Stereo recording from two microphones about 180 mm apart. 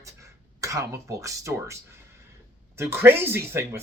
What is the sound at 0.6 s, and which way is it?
Speech, 20° right (ahead or behind).